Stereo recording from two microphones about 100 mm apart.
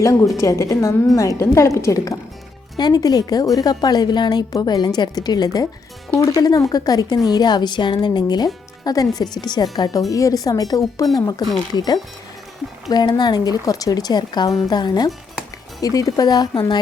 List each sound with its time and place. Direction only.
0.0 s speech: 35° left (ahead or behind)
2.7 s a woman's voice: 45° left (ahead or behind)